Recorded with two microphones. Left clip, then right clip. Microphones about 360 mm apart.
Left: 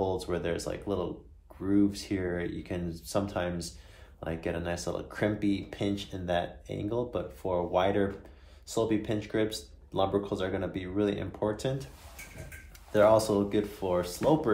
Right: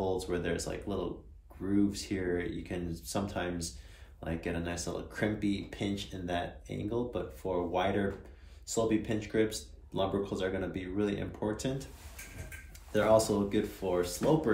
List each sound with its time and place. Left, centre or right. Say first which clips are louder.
0.0 s speech: left 2 dB; centre
12.9 s speech: left 4 dB; centre